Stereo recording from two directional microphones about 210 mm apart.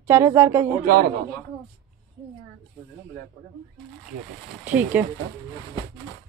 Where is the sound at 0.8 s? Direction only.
45° right (ahead or behind).